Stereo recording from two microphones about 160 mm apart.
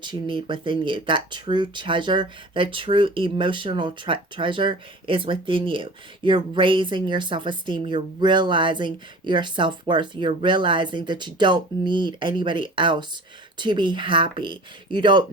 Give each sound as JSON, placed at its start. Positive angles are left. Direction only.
{"t": 0.0, "sound": "speech", "side_deg": -30}